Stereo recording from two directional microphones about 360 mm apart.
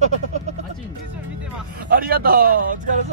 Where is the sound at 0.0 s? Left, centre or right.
Centre.